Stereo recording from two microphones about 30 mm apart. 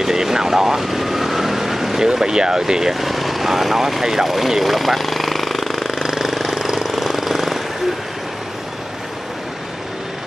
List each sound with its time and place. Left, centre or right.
0.0 s vehicle: centre
2.2 s speech: right
2.9 s speech: centre
4.3 s jackhammer: centre